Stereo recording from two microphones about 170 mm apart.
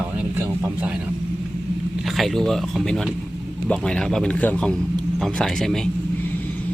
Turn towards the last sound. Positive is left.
turn(degrees=5)  # may be behind; listen again after turning